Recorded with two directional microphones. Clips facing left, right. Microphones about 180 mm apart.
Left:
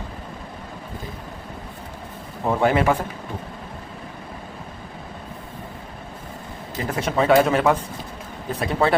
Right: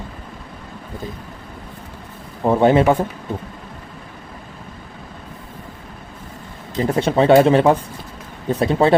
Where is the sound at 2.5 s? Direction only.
25° right (ahead or behind).